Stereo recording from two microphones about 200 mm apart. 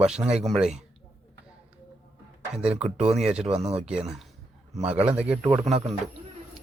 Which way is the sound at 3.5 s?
30° right (ahead or behind).